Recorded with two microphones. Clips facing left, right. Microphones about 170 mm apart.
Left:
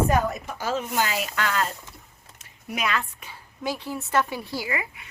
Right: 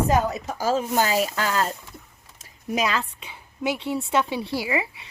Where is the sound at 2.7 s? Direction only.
30° right (ahead or behind).